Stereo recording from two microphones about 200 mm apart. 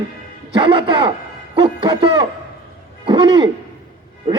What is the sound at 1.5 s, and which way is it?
A man's voice, 25° right (ahead or behind).